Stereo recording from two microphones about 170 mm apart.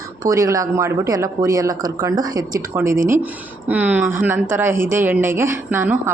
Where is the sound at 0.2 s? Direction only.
20° right (ahead or behind).